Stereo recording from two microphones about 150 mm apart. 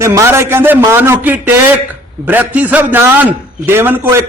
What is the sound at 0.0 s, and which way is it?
A man's voice, 20° right (ahead or behind).